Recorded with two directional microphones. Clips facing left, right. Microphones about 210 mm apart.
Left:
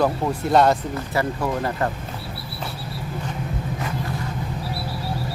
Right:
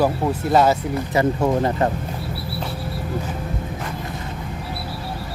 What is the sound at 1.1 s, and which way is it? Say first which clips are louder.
Speech: right 5 dB; 20° right (ahead or behind).